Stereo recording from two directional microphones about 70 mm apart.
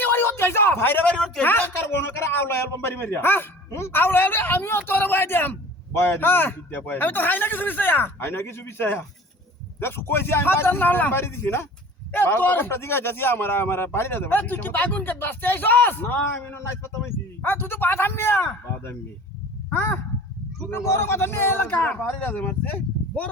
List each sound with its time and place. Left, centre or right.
0.0 s speech: left
1.0 s speech: centre
1.5 s a man's voice: left
19.7 s a man's voice: left